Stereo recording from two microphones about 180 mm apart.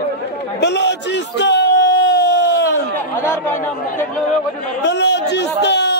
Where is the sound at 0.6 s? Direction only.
70° left (ahead or behind).